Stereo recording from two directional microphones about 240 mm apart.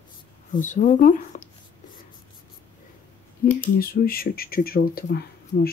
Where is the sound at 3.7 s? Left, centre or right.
Left.